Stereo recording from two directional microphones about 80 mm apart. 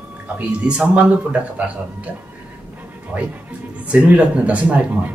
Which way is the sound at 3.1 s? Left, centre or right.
Centre.